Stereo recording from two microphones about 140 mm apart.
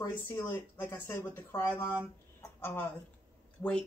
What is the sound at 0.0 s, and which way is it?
Speech, 20° left (ahead or behind).